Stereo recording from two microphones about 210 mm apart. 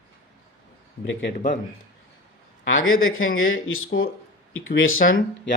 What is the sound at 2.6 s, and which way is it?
A man's voice, 70° left (ahead or behind).